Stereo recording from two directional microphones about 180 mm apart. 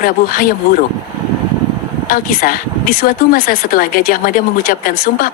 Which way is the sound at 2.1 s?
50° left (ahead or behind).